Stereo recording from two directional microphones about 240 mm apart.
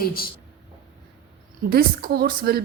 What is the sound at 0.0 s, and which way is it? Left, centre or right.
Speech, left.